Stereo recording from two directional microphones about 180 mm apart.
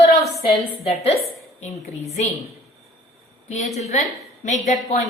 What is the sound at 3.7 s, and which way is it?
A woman's voice, 40° left (ahead or behind).